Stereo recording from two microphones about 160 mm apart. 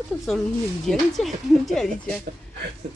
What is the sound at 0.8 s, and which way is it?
Speech, centre (ahead or behind).